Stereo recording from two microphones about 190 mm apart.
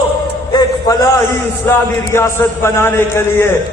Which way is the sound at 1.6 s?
15° left (ahead or behind).